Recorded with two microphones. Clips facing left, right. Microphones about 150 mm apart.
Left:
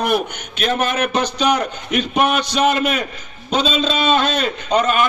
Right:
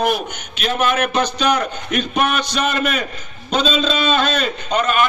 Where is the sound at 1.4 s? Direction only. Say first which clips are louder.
Left 1 dB; 20° left (ahead or behind).